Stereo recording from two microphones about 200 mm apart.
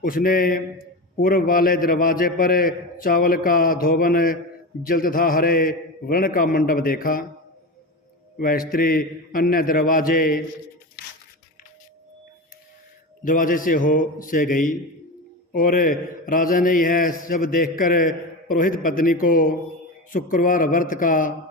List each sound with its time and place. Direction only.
0.0 s a man's voice: 45° left (ahead or behind)
8.4 s a man's voice: 45° left (ahead or behind)
13.2 s a man's voice: 45° left (ahead or behind)